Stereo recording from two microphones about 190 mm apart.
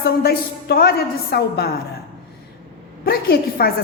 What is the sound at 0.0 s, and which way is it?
A woman's voice, 55° left (ahead or behind).